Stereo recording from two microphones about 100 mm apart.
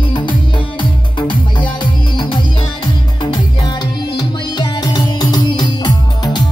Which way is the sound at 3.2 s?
45° left (ahead or behind).